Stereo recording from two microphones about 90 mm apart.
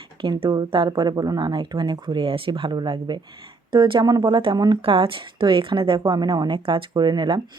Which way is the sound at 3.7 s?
65° right (ahead or behind).